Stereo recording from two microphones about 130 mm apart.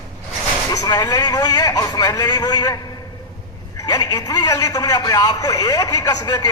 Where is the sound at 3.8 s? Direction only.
30° left (ahead or behind).